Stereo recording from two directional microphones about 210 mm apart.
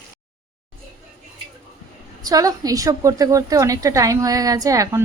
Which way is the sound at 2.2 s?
15° right (ahead or behind).